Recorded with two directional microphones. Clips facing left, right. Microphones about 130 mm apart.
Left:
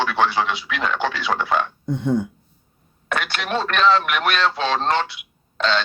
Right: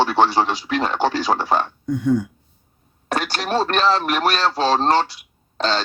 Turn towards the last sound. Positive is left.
turn(degrees=-35)  # may be behind; listen again after turning